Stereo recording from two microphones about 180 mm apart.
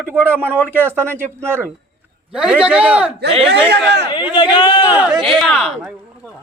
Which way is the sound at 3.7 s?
70° right (ahead or behind).